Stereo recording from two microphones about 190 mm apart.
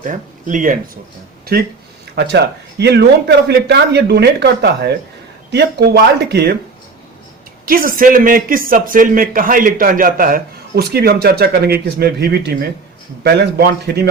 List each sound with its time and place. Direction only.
0.0 s speech: 45° right (ahead or behind)
1.5 s speech: 55° right (ahead or behind)
7.6 s a man's voice: 50° right (ahead or behind)